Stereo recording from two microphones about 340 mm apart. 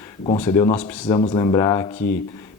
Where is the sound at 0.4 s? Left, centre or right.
Centre.